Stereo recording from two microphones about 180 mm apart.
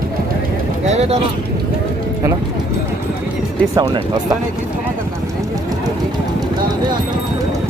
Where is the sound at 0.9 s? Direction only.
35° right (ahead or behind).